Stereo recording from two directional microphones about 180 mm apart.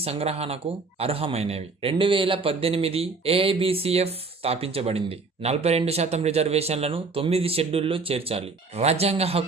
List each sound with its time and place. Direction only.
0.0 s speech: 35° right (ahead or behind)